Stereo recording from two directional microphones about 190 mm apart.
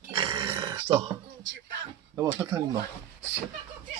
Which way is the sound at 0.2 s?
30° right (ahead or behind).